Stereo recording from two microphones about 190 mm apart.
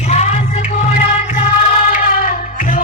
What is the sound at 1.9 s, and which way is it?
Music, 45° left (ahead or behind).